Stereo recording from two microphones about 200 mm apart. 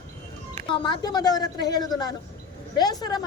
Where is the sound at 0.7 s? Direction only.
20° left (ahead or behind).